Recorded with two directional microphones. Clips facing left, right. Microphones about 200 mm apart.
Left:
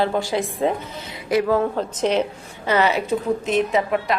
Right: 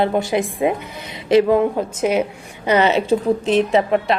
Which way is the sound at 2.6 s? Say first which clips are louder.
Right 4 dB; 20° right (ahead or behind).